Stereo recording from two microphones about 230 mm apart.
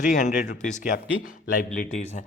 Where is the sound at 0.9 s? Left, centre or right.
Left.